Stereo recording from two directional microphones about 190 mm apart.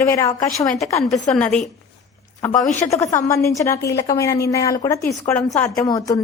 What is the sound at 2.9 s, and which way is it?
A woman's voice, 15° left (ahead or behind).